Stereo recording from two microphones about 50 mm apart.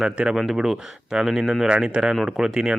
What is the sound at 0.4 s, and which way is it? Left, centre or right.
Speech, centre.